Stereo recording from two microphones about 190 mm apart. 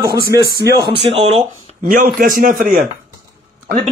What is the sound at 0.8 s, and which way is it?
Speech, 30° right (ahead or behind).